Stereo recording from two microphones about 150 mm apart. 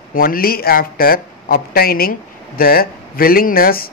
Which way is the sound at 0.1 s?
75° left (ahead or behind).